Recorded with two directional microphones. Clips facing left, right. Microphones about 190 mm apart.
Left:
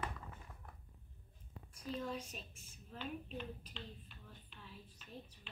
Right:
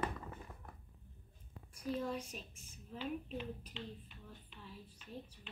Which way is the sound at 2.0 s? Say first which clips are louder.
Right 3 dB; 10° right (ahead or behind).